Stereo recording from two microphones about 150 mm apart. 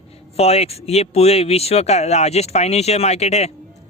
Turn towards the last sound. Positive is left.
turn(degrees=45)  # may be behind; listen again after turning